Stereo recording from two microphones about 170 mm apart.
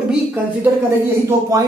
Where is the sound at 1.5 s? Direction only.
20° right (ahead or behind).